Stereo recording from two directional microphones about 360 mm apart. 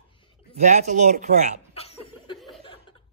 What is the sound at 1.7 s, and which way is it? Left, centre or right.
Chuckle, centre.